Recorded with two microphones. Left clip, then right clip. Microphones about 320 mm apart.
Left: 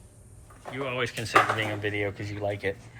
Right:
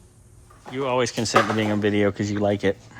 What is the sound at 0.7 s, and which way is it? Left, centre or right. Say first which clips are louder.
Speech: right 8 dB; centre.